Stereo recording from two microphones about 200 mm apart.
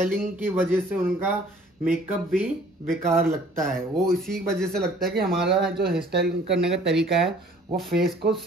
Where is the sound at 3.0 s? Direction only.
40° right (ahead or behind).